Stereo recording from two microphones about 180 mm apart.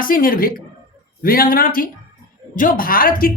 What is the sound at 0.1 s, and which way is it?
A woman's voice, 50° left (ahead or behind).